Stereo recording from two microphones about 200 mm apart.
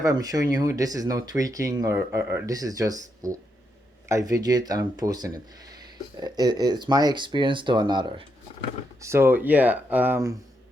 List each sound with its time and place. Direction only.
0.0 s speech: 20° right (ahead or behind)